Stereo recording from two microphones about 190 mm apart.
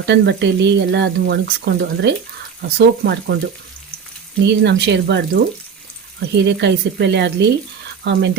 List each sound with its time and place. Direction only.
0.0 s speech: 65° right (ahead or behind)
4.4 s speech: 65° right (ahead or behind)